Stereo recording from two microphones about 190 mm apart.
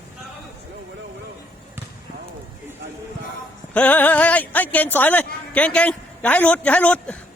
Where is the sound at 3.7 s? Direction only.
10° left (ahead or behind).